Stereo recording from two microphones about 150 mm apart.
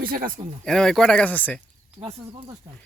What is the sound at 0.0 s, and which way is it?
Speech, 75° right (ahead or behind).